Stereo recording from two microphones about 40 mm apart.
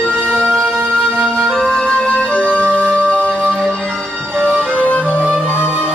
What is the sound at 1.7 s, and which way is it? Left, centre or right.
Music, left.